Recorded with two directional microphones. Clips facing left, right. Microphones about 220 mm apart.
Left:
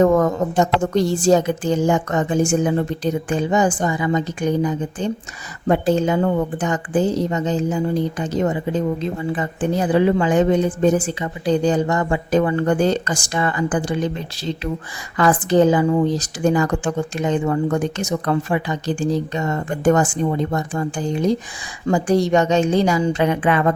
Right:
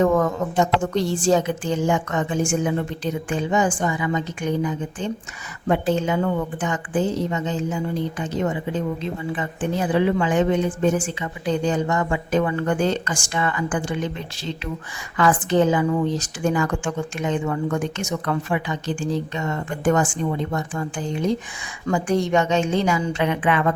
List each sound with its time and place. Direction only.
0.0 s a woman's voice: 40° left (ahead or behind)